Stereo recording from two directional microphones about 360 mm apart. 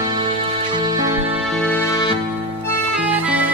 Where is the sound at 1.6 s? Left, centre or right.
Centre.